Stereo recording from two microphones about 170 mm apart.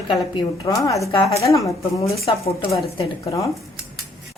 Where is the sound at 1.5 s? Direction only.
20° left (ahead or behind).